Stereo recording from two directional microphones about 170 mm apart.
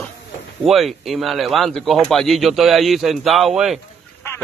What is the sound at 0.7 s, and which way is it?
A man's voice, centre (ahead or behind).